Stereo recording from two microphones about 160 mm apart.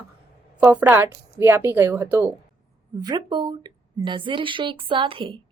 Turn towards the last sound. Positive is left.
turn(degrees=-30)  # may be behind; listen again after turning